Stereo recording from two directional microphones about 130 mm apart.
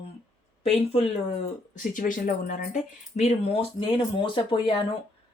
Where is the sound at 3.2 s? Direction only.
55° left (ahead or behind).